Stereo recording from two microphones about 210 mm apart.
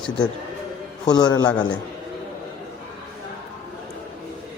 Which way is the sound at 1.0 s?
20° left (ahead or behind).